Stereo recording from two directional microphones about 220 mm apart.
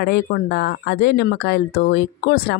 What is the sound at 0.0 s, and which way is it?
Speech, 45° left (ahead or behind).